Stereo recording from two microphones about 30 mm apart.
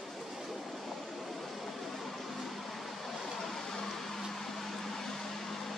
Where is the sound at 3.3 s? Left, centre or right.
Centre.